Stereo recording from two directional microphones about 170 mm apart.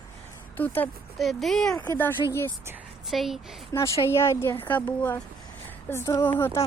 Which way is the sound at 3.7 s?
15° left (ahead or behind).